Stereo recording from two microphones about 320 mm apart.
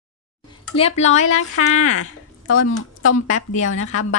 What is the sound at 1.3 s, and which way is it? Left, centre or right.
A woman's voice, left.